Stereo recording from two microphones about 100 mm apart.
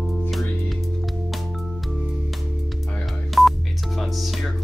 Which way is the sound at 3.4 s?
Centre (ahead or behind).